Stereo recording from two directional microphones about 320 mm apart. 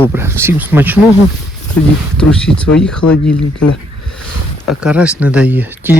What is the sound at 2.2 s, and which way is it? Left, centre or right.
Speech, centre.